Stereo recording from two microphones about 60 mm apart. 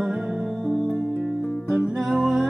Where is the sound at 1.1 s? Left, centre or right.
Left.